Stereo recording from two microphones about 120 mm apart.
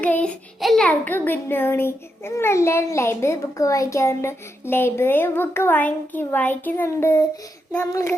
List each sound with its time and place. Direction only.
0.0 s child singing: 10° left (ahead or behind)
0.6 s a sound: centre (ahead or behind)
0.9 s a child's voice: 15° left (ahead or behind)